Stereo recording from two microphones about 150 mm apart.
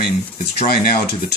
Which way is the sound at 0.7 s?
75° left (ahead or behind).